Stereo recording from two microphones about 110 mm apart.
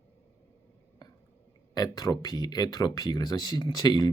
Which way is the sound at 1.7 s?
40° left (ahead or behind).